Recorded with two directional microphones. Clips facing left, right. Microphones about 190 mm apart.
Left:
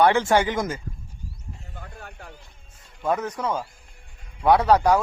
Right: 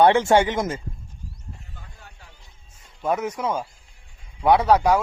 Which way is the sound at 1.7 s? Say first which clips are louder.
Left 7 dB; 60° left (ahead or behind).